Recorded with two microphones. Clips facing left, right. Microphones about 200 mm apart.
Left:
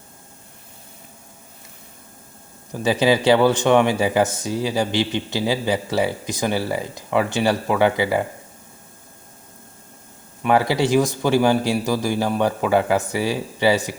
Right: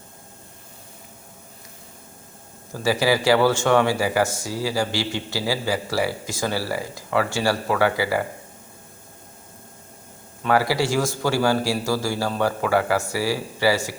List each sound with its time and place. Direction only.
2.7 s speech: 20° left (ahead or behind)
10.4 s speech: 20° left (ahead or behind)